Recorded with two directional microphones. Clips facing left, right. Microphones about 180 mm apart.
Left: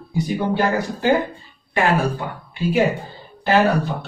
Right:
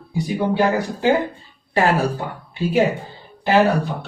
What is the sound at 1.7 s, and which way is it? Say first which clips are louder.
Speech: right 1 dB; 40° right (ahead or behind).